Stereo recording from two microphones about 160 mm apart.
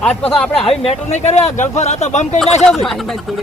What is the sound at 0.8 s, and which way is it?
Speech, 45° left (ahead or behind).